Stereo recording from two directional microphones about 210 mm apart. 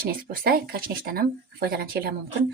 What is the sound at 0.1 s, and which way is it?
Speech, 45° right (ahead or behind).